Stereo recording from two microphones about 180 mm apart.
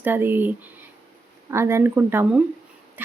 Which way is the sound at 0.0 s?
10° right (ahead or behind).